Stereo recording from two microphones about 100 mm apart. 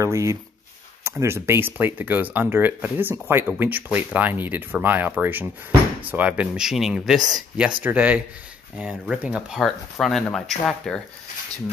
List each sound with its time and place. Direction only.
0.0 s speech: 30° right (ahead or behind); by 9.7 s 10° right (ahead or behind)
9.7 s speech: centre (ahead or behind)